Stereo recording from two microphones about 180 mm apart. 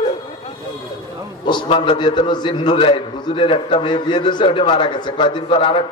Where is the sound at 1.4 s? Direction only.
25° left (ahead or behind).